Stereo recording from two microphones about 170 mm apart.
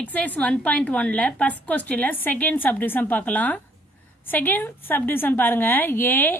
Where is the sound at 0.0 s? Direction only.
10° left (ahead or behind).